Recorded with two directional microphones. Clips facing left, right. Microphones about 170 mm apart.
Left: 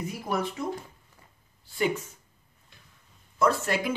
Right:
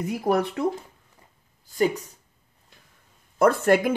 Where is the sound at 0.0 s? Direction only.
65° right (ahead or behind).